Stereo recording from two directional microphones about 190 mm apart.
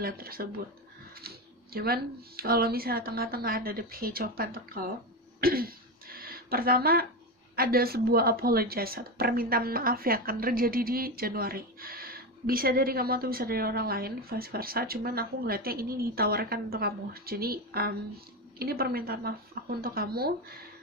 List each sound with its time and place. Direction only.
0.0 s speech: 50° right (ahead or behind)
5.4 s throat clearing: 50° right (ahead or behind)
7.5 s speech: 50° right (ahead or behind)